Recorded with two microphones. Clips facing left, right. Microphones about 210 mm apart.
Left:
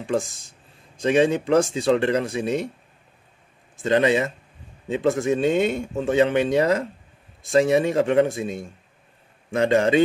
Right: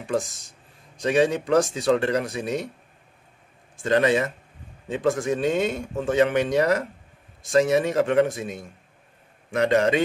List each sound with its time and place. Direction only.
1.0 s speech: 25° left (ahead or behind)
3.8 s speech: 25° left (ahead or behind)